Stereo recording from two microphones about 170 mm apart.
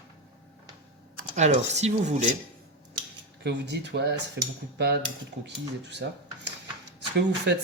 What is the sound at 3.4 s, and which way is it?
Speech, 90° right.